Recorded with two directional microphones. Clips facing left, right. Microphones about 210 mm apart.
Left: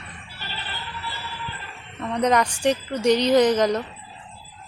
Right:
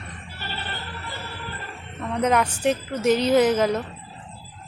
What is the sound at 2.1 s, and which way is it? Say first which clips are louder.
A woman's voice: left 1 dB; 5° right (ahead or behind).